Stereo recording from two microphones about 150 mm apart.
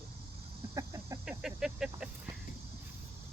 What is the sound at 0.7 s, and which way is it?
Speech, 20° right (ahead or behind).